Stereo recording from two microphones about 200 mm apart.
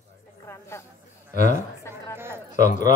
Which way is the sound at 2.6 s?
40° left (ahead or behind).